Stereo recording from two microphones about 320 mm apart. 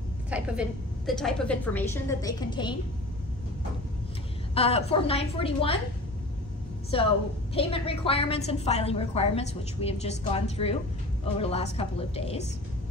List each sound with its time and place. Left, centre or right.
0.3 s a woman's voice: centre
4.6 s a woman's voice: centre
6.9 s a woman's voice: centre